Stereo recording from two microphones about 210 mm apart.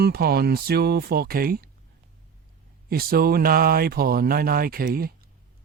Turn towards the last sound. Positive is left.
turn(degrees=-45)  # may be behind; listen again after turning